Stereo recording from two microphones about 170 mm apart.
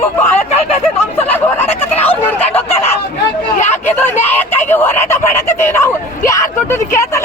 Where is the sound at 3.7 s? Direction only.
15° left (ahead or behind).